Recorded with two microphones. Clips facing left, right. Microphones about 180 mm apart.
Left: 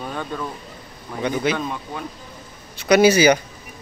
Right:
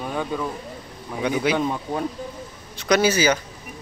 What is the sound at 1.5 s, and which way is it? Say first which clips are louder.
Speech: right 4 dB; 20° right (ahead or behind).